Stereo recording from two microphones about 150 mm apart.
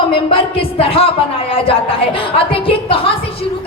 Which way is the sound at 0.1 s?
40° left (ahead or behind).